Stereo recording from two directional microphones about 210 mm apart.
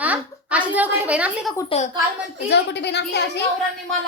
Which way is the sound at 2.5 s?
55° left (ahead or behind).